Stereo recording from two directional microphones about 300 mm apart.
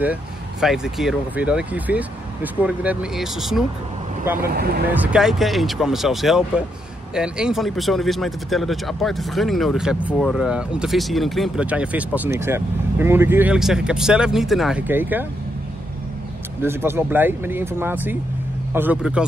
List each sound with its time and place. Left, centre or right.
0.0 s speech: centre
4.5 s speech: right
4.9 s speech: centre
16.6 s speech: centre